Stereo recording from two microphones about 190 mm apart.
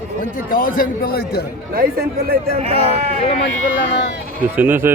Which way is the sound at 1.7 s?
50° right (ahead or behind).